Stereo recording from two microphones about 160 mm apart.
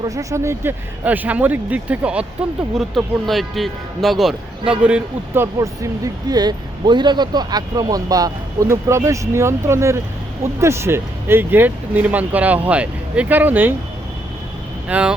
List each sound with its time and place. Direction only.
0.0 s a man's voice: 20° right (ahead or behind)
14.8 s speech: 10° right (ahead or behind)